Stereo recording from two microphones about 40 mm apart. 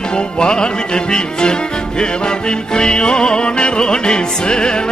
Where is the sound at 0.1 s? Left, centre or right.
Left.